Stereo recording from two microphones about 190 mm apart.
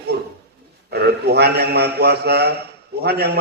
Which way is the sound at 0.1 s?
60° right (ahead or behind).